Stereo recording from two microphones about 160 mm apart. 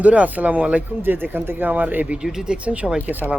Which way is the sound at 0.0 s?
10° right (ahead or behind).